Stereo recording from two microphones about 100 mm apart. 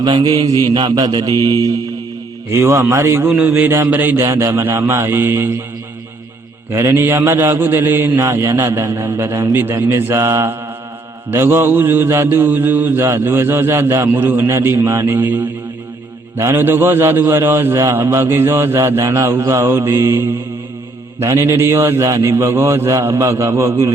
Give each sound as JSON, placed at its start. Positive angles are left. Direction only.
{"t": 0.0, "sound": "speech", "side_deg": -45}
{"t": 2.5, "sound": "mantra", "side_deg": -25}
{"t": 4.3, "sound": "mantra", "side_deg": -30}
{"t": 6.7, "sound": "mantra", "side_deg": -25}